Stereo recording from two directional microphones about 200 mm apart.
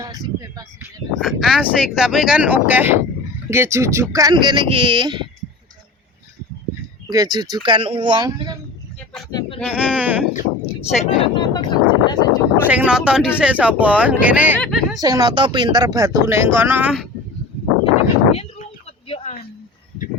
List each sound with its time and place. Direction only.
0.0 s a sound: 20° right (ahead or behind)
1.2 s speech: centre (ahead or behind); by 5.2 s 20° right (ahead or behind)
7.1 s speech: 20° right (ahead or behind)
9.6 s speech: 5° right (ahead or behind)
10.8 s speech: 30° left (ahead or behind)
12.6 s speech: 5° right (ahead or behind)
15.0 s speech: 20° right (ahead or behind)
18.3 s a sound: 30° left (ahead or behind)